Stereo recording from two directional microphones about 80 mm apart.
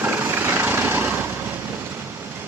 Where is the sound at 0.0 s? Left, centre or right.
Right.